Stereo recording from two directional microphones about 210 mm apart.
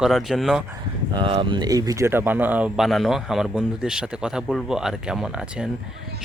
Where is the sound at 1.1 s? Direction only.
25° right (ahead or behind).